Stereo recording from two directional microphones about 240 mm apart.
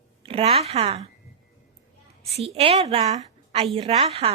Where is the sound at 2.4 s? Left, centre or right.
Right.